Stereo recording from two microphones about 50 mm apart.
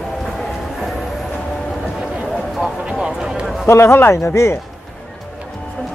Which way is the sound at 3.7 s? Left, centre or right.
Left.